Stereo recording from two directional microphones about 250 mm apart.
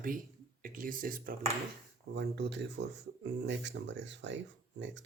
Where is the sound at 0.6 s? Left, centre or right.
Right.